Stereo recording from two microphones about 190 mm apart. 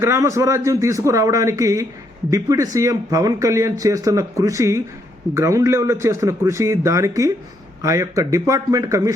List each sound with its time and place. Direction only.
0.0 s speech: 15° right (ahead or behind)